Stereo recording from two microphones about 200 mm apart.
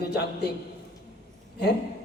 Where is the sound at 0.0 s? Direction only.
55° left (ahead or behind).